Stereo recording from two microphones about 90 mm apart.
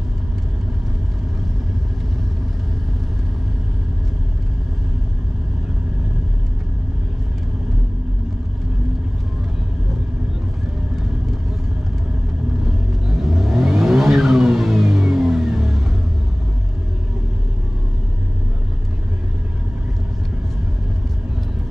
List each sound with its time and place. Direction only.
13.2 s vehicle: centre (ahead or behind)